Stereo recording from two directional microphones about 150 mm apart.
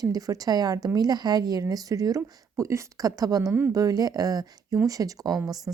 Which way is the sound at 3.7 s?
25° right (ahead or behind).